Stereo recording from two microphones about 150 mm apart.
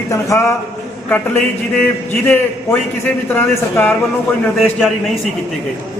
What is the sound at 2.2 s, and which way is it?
A man's voice, 15° left (ahead or behind).